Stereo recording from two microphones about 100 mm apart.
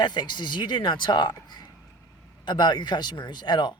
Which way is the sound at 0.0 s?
45° left (ahead or behind).